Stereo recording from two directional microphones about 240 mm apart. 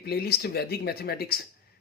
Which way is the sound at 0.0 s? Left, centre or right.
Left.